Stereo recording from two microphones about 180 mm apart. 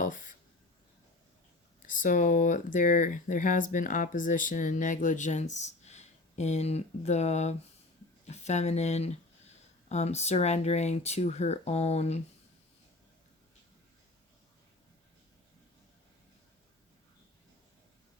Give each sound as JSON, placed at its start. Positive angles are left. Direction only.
{"t": 0.0, "sound": "writing", "side_deg": 45}
{"t": 1.9, "sound": "speech", "side_deg": 45}